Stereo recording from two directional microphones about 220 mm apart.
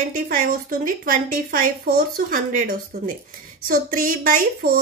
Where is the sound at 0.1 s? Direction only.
40° right (ahead or behind).